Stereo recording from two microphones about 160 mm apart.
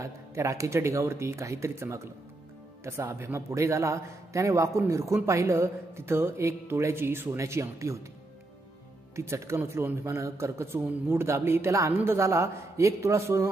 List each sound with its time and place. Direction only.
0.0 s a man's voice: 20° right (ahead or behind)
9.1 s a man's voice: 15° right (ahead or behind)